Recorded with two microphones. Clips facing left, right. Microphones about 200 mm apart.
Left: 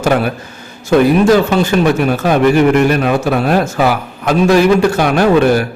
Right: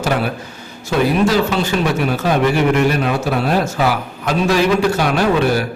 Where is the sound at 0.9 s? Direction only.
50° left (ahead or behind).